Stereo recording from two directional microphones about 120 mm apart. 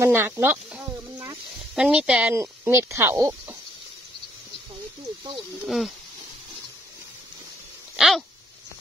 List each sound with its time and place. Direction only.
0.0 s a sound: 20° right (ahead or behind)
1.8 s speech: 10° right (ahead or behind)
2.3 s speech: 25° right (ahead or behind)
5.7 s speech: centre (ahead or behind)
7.9 s dog: 5° right (ahead or behind)